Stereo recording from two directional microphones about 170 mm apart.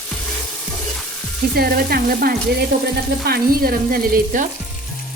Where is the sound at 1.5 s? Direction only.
65° right (ahead or behind).